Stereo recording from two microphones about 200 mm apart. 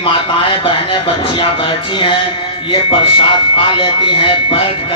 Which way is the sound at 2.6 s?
25° left (ahead or behind).